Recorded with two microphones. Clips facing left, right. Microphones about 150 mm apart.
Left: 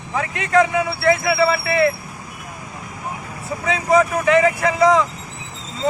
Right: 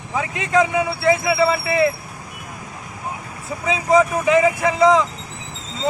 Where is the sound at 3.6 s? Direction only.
5° right (ahead or behind).